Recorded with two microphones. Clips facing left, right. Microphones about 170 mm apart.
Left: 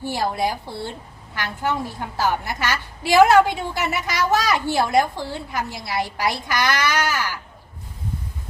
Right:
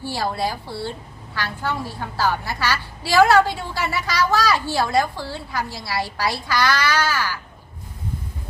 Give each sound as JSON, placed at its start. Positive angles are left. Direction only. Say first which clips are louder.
{"t": 0.0, "sound": "a woman's voice", "louder": "left 1 dB", "side_deg": 20}